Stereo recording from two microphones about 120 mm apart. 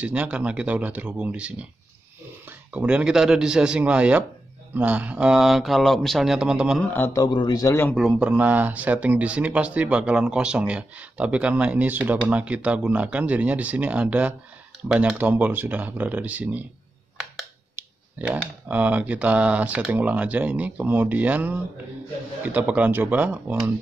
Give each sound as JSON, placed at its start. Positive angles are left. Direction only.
{"t": 0.0, "sound": "speech", "side_deg": -10}
{"t": 2.7, "sound": "speech", "side_deg": -10}
{"t": 6.8, "sound": "a man's voice", "side_deg": 15}
{"t": 7.2, "sound": "a man's voice", "side_deg": 40}
{"t": 7.9, "sound": "speech", "side_deg": -5}
{"t": 17.7, "sound": "speech", "side_deg": -15}